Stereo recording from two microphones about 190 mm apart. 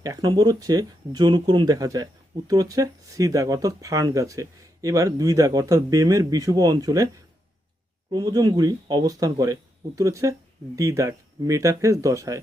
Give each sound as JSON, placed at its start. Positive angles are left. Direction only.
{"t": 0.0, "sound": "speech", "side_deg": -20}
{"t": 8.1, "sound": "speech", "side_deg": -20}